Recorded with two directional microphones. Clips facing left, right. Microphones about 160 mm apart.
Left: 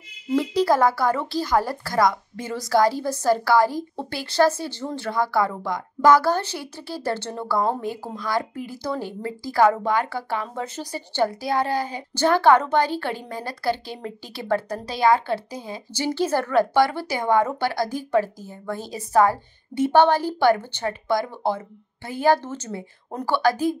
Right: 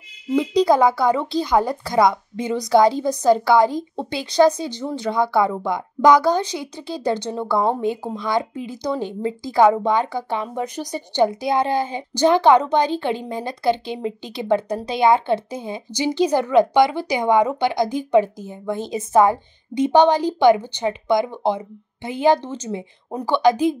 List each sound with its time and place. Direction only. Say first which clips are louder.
0.4 s a woman's voice: right 4 dB; 20° right (ahead or behind)